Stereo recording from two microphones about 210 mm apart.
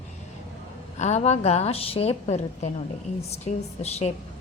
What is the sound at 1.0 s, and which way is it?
A woman's voice, 35° left (ahead or behind).